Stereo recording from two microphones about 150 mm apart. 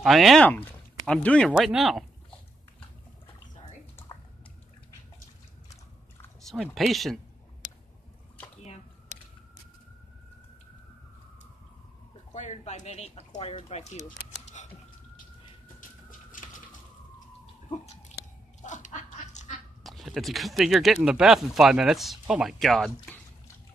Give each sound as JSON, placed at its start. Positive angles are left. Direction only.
{"t": 0.0, "sound": "speech", "side_deg": 0}
{"t": 0.5, "sound": "speech", "side_deg": 10}
{"t": 4.1, "sound": "drip", "side_deg": 25}
{"t": 6.5, "sound": "speech", "side_deg": 0}
{"t": 12.4, "sound": "speech", "side_deg": 50}
{"t": 14.0, "sound": "a sound", "side_deg": 55}
{"t": 15.8, "sound": "a sound", "side_deg": 60}
{"t": 17.6, "sound": "a sound", "side_deg": 45}
{"t": 18.6, "sound": "duck", "side_deg": 55}
{"t": 19.8, "sound": "speech", "side_deg": 0}